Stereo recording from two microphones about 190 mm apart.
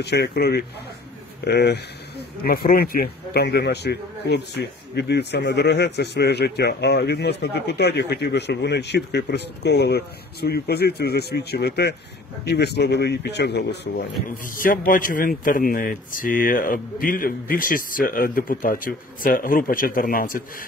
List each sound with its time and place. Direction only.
0.0 s a man's voice: 60° left (ahead or behind)